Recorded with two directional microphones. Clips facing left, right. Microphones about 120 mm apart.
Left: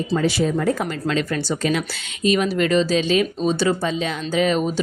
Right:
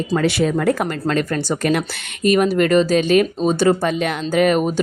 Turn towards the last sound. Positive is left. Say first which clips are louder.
# right 4 dB
turn(degrees=-50)  # may be behind; listen again after turning